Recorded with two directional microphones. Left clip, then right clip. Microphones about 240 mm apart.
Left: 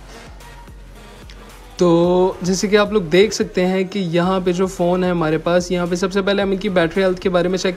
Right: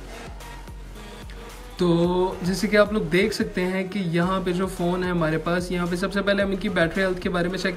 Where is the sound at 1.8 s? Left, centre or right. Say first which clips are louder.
Left 8 dB; centre.